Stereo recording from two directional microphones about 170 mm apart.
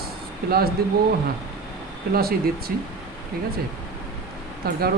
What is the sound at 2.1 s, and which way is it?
Speech, 65° right (ahead or behind).